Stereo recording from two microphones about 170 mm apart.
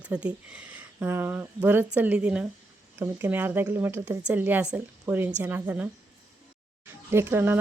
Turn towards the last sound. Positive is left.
turn(degrees=-10)  # may be behind; listen again after turning